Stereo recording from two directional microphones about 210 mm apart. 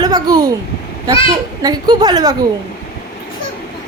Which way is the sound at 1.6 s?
20° right (ahead or behind).